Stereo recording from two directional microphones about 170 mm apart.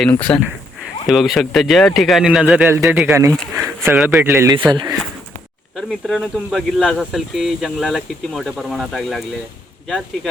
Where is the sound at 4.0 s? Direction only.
5° right (ahead or behind).